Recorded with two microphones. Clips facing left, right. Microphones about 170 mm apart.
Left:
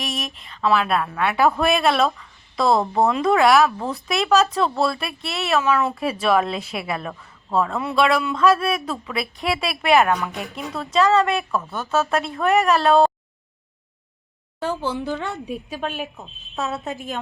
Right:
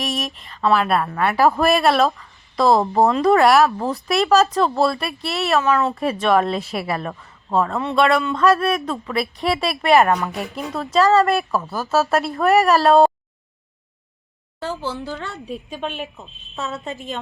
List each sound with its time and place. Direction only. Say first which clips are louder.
0.0 s speech: right 4 dB; centre (ahead or behind)
14.8 s speech: left 3 dB; 15° left (ahead or behind)
15.7 s speech: right 1 dB; 5° left (ahead or behind)